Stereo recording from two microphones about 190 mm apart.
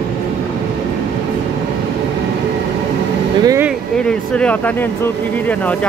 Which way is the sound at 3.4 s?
15° right (ahead or behind).